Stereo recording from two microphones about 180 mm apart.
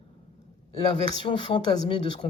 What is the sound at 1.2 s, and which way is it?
Speech, 25° left (ahead or behind).